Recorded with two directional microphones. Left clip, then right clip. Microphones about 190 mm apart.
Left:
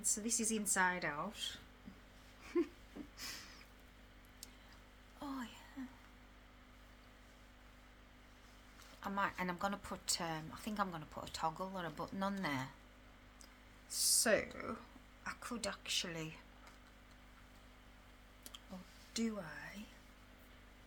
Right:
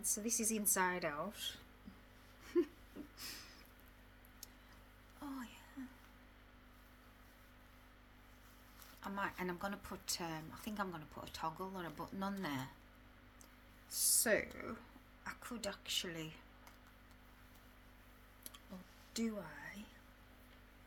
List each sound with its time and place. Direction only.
0.0 s speech: 5° left (ahead or behind)
2.5 s speech: 15° left (ahead or behind)
3.2 s a sound: 20° left (ahead or behind)
5.2 s speech: 20° left (ahead or behind)
9.0 s a woman's voice: 15° left (ahead or behind)
13.9 s speech: 15° left (ahead or behind)
19.1 s speech: 10° left (ahead or behind)